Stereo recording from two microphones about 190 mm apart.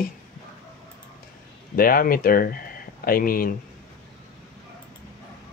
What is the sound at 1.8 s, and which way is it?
Speech, 50° left (ahead or behind).